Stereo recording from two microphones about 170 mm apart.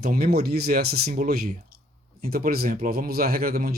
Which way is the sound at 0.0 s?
65° right (ahead or behind).